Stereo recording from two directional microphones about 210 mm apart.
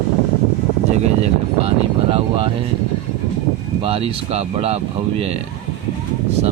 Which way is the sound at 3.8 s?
25° right (ahead or behind).